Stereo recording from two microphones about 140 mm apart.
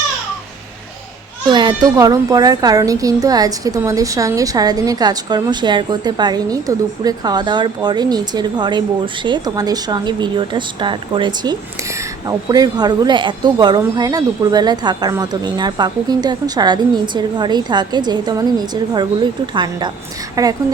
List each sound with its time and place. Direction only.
1.5 s a child's voice: 35° right (ahead or behind)